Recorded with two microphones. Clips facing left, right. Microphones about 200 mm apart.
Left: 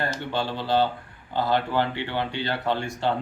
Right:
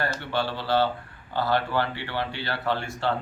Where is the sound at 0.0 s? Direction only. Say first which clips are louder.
Even; 15° left (ahead or behind).